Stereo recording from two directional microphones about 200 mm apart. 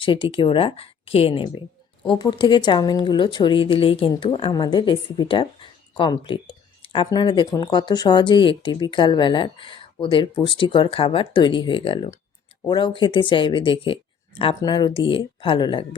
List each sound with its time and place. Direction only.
0.0 s a woman's voice: 25° left (ahead or behind)